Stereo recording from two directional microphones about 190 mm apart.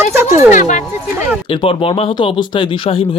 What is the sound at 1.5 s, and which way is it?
Speech, 30° left (ahead or behind).